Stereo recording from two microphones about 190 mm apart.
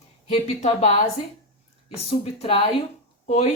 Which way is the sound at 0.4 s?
40° left (ahead or behind).